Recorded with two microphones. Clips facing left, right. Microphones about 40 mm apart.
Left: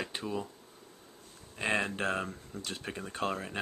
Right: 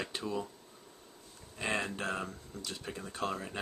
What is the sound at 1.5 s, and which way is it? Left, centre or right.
Speech, left.